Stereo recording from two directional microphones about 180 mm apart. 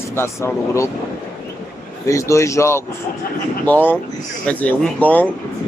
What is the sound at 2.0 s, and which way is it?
Speech, 15° left (ahead or behind).